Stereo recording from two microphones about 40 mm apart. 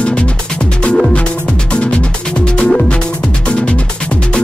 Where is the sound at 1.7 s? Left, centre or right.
Left.